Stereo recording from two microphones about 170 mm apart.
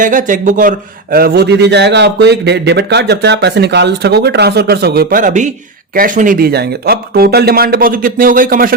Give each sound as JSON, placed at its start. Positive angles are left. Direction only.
{"t": 0.0, "sound": "a man's voice", "side_deg": -50}